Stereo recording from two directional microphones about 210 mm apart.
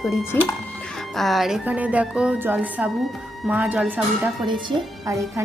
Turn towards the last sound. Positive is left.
turn(degrees=-20)  # may be behind; listen again after turning